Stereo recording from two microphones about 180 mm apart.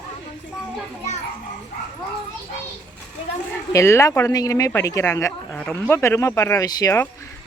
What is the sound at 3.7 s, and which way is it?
Speech, 15° left (ahead or behind).